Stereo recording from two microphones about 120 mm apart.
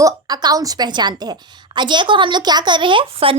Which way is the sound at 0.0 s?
30° right (ahead or behind).